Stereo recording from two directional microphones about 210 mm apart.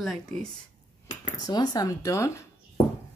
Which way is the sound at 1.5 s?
20° left (ahead or behind).